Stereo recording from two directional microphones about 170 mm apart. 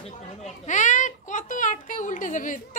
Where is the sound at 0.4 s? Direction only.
45° left (ahead or behind).